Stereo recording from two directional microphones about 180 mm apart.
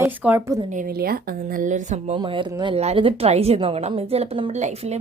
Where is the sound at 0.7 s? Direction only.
50° right (ahead or behind).